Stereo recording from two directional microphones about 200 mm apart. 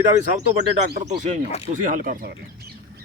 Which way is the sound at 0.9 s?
40° right (ahead or behind).